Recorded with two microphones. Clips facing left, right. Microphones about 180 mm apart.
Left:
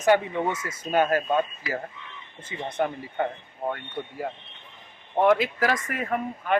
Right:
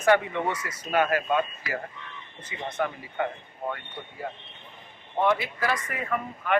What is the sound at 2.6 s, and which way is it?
Speech, 30° left (ahead or behind).